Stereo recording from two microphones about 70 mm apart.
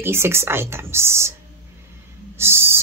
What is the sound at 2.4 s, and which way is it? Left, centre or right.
Speech, right.